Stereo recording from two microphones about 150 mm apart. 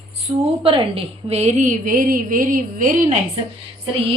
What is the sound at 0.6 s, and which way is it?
A woman's voice, 35° right (ahead or behind).